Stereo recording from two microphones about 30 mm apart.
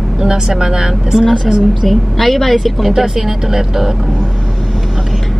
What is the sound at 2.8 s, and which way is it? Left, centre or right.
Speech, centre.